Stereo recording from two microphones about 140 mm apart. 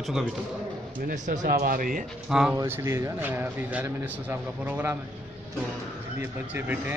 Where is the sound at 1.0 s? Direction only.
60° right (ahead or behind); by 2.0 s 80° right.